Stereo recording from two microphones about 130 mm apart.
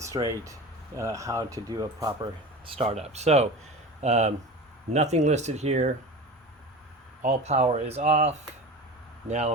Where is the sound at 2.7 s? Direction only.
55° right (ahead or behind).